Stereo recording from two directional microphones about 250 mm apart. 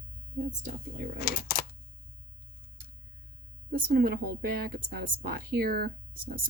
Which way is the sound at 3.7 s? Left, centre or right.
Right.